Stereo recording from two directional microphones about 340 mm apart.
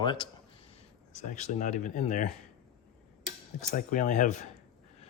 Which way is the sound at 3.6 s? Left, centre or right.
Left.